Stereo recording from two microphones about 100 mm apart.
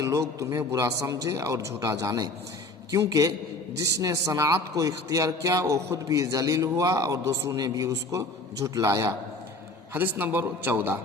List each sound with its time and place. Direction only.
0.0 s a man's voice: 30° right (ahead or behind)
9.9 s a man's voice: 20° right (ahead or behind)